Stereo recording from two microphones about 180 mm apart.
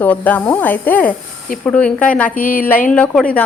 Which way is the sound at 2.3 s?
50° left (ahead or behind).